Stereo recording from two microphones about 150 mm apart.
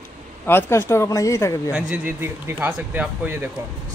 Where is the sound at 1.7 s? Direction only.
15° right (ahead or behind).